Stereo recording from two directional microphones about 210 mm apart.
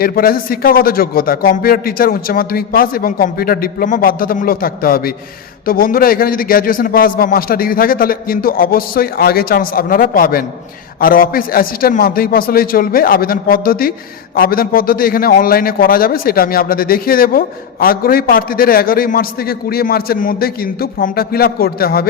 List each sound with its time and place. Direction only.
0.0 s a man's voice: 45° left (ahead or behind)